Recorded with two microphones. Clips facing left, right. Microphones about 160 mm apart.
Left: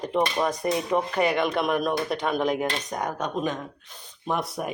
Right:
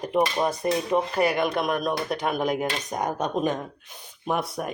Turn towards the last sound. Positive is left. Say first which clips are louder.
# right 1 dB
turn(degrees=0)  # may be behind; listen again after turning